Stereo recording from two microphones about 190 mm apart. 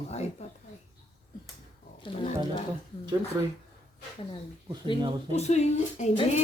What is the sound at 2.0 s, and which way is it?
Speech, 25° left (ahead or behind).